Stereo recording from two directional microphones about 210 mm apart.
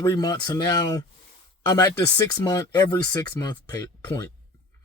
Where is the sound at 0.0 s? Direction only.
15° left (ahead or behind).